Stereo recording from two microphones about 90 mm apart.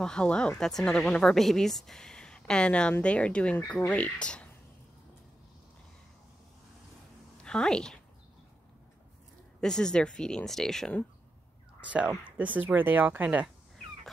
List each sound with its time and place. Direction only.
0.0 s a woman's voice: 10° left (ahead or behind)
7.4 s a woman's voice: 10° left (ahead or behind)
9.6 s a woman's voice: 5° left (ahead or behind)
11.8 s speech: 15° right (ahead or behind)